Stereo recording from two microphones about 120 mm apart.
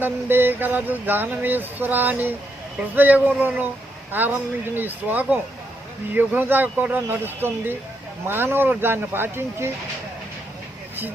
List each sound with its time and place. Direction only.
0.0 s speech: 15° right (ahead or behind)